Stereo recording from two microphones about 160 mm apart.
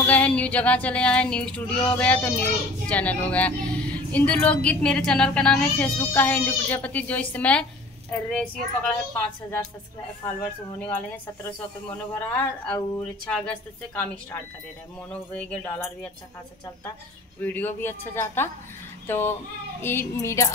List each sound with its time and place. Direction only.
0.0 s a woman's voice: 10° left (ahead or behind)
11.9 s speech: 10° left (ahead or behind)
15.0 s speech: 10° left (ahead or behind)
17.4 s speech: 10° left (ahead or behind)